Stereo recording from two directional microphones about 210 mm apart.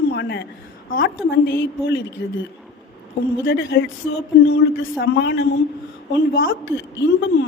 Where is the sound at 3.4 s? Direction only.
60° left (ahead or behind).